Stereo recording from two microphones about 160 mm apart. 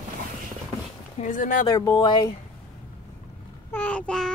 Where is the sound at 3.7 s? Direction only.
10° left (ahead or behind).